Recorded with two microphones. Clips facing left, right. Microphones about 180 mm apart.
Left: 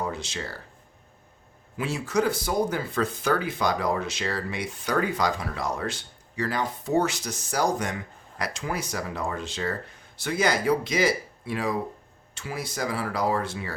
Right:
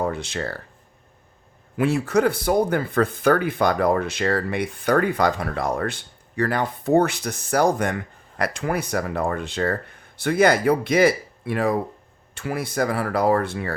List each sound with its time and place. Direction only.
0.0 s speech: 55° right (ahead or behind)
1.7 s speech: 60° right (ahead or behind)